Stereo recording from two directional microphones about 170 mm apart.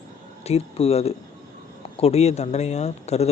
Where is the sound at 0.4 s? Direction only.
35° left (ahead or behind).